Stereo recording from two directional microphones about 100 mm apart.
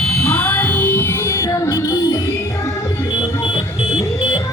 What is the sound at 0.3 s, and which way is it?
Music, 15° left (ahead or behind).